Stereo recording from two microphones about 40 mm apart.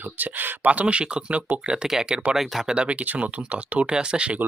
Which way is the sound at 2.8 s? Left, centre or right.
Right.